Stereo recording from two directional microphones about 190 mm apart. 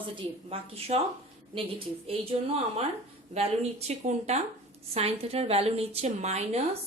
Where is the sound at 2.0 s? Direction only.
30° right (ahead or behind).